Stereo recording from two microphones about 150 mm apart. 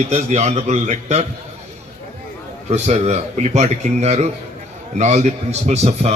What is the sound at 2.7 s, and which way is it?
A man's voice, 50° right (ahead or behind).